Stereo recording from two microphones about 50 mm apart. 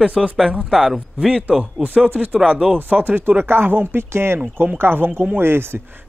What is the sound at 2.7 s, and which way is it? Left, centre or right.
Speech, right.